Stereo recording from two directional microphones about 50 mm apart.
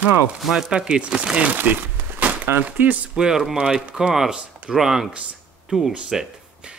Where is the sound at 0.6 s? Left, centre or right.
Centre.